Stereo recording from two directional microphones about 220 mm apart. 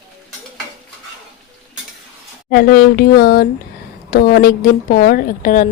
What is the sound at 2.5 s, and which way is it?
A woman's voice, 40° left (ahead or behind).